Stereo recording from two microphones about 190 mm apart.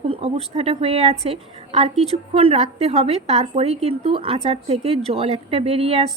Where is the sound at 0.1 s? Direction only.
30° right (ahead or behind).